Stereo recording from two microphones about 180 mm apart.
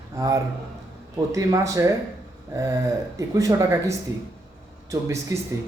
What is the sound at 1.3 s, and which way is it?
Speech, 20° right (ahead or behind).